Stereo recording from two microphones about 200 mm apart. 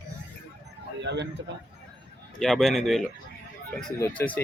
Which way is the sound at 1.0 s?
60° right (ahead or behind).